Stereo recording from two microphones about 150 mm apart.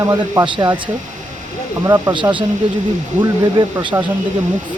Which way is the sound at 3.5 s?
25° right (ahead or behind).